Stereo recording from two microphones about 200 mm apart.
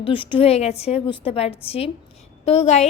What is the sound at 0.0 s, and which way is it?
A woman's voice, 25° left (ahead or behind).